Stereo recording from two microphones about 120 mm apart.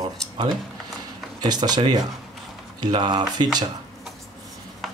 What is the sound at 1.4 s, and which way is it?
Speech, 35° right (ahead or behind).